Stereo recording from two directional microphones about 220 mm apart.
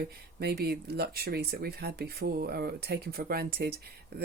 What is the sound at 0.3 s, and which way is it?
Speech, 45° right (ahead or behind).